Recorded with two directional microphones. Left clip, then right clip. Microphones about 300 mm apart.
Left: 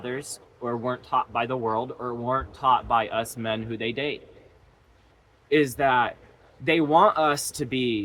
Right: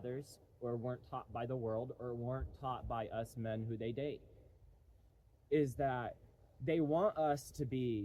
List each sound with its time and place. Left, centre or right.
0.0 s speech: centre
5.5 s speech: centre